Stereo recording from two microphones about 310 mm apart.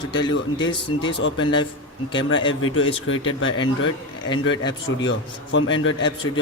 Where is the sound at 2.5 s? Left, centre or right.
Left.